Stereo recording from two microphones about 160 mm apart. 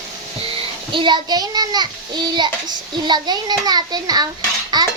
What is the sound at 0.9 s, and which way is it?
A child's voice, 30° right (ahead or behind).